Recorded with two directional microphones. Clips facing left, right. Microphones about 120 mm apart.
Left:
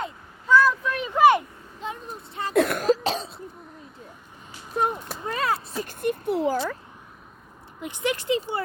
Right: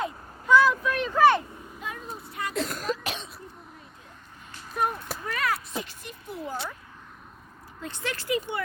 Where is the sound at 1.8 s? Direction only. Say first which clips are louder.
Left 4 dB; 30° left (ahead or behind).